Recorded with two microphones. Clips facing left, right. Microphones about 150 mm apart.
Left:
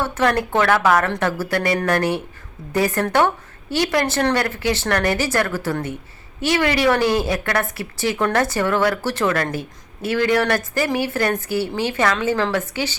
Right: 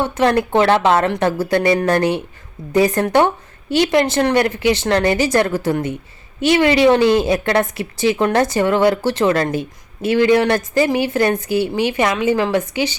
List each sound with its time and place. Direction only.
0.0 s a woman's voice: 20° right (ahead or behind)